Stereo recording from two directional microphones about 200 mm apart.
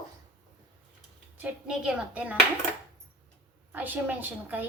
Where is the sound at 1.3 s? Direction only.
5° right (ahead or behind).